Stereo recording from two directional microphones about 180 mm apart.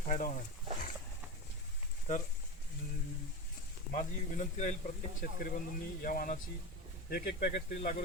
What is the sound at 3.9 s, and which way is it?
Speech, 45° left (ahead or behind).